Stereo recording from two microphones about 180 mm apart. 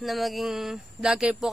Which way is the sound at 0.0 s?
Centre (ahead or behind).